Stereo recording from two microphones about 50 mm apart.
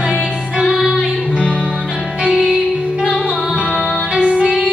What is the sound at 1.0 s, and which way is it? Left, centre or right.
Music, right.